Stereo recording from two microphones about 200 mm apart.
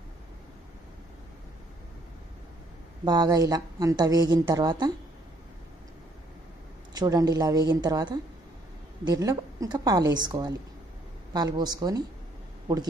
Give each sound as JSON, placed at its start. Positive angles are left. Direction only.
{"t": 3.1, "sound": "a woman's voice", "side_deg": -20}
{"t": 6.9, "sound": "a woman's voice", "side_deg": -20}